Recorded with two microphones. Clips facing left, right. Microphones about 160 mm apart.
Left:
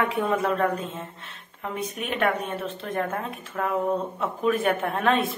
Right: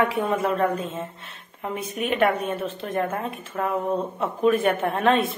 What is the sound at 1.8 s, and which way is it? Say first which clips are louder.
Speech: right 5 dB; 5° right (ahead or behind).